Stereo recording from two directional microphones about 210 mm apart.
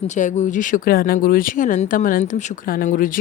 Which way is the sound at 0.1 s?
35° left (ahead or behind).